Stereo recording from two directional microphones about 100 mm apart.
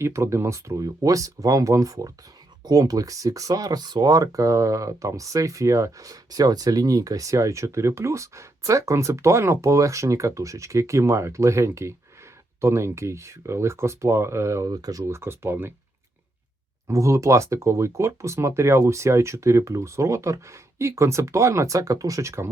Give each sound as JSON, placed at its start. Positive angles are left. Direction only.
{"t": 0.0, "sound": "speech", "side_deg": -30}
{"t": 14.7, "sound": "speech", "side_deg": -40}
{"t": 15.1, "sound": "speech", "side_deg": -25}
{"t": 16.9, "sound": "speech", "side_deg": -30}